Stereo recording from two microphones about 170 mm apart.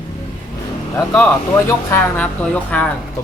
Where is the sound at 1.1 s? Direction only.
10° left (ahead or behind).